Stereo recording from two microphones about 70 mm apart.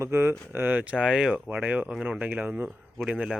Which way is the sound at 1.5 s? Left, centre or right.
Right.